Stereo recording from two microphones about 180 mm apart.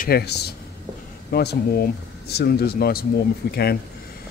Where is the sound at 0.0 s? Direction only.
60° left (ahead or behind).